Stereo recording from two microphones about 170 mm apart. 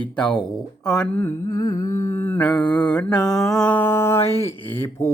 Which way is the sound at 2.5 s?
25° left (ahead or behind).